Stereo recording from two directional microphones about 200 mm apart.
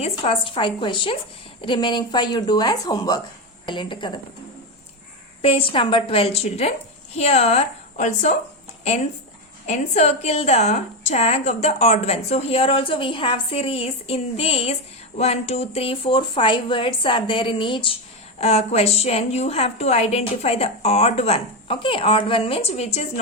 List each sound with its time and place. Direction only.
0.0 s a woman's voice: 25° left (ahead or behind)
5.4 s a woman's voice: 30° left (ahead or behind)
9.6 s a woman's voice: 35° left (ahead or behind)